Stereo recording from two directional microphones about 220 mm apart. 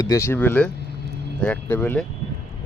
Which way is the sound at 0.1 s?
10° left (ahead or behind).